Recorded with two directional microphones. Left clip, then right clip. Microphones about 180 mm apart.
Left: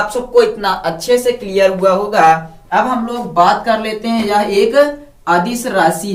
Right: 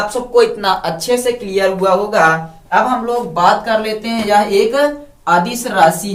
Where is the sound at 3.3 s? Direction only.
20° right (ahead or behind).